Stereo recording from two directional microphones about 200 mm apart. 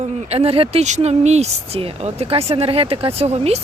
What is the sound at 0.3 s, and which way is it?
A woman's voice, 30° right (ahead or behind).